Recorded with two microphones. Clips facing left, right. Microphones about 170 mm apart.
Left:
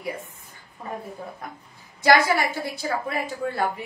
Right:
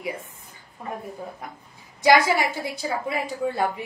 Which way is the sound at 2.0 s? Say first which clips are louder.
Right 1 dB; 15° right (ahead or behind).